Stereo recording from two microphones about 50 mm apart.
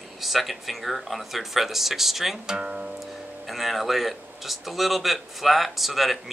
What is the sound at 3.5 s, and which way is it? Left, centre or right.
Speech, centre.